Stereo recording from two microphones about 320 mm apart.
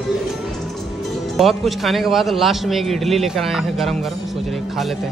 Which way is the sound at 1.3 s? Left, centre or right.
Centre.